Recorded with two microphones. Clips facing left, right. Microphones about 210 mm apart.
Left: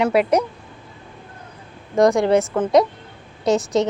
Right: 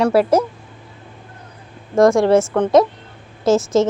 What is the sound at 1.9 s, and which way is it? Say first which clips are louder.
A woman's voice: right 3 dB; centre (ahead or behind).